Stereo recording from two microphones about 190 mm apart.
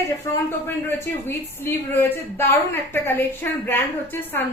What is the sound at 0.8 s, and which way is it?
Speech, 10° left (ahead or behind).